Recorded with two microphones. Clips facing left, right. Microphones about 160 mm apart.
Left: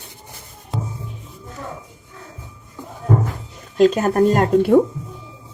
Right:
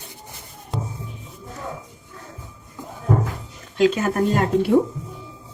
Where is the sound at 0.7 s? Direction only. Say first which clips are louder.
Left 1 dB; centre (ahead or behind).